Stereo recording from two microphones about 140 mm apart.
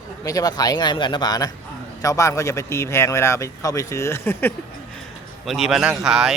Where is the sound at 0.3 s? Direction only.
25° left (ahead or behind).